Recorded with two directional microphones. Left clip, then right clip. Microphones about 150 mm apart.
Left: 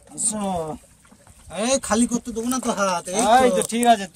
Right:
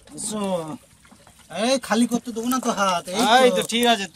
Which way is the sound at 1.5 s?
60° left (ahead or behind).